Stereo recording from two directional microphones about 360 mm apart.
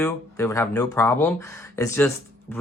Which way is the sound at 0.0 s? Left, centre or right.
Centre.